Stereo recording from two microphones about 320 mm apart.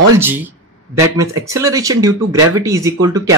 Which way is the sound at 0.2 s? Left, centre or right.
Centre.